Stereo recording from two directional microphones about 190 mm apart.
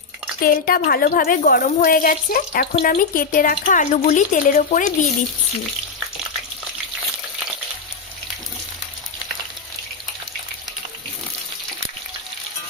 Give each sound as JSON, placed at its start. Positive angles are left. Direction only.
{"t": 0.4, "sound": "a woman's voice", "side_deg": 50}